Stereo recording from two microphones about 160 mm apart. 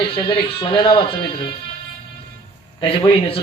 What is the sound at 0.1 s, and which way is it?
Speech, 35° left (ahead or behind).